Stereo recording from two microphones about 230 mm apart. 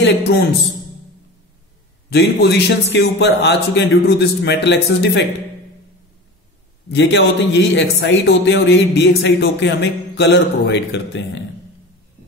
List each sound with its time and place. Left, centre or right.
0.0 s a man's voice: left
2.0 s a man's voice: left
7.0 s a man's voice: left